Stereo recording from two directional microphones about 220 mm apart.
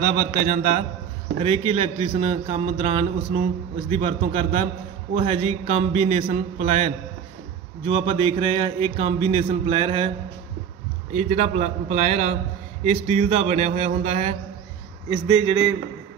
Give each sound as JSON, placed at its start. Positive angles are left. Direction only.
{"t": 0.5, "sound": "speech", "side_deg": -40}
{"t": 1.4, "sound": "speech", "side_deg": -25}
{"t": 11.1, "sound": "speech", "side_deg": -30}
{"t": 15.0, "sound": "speech", "side_deg": -20}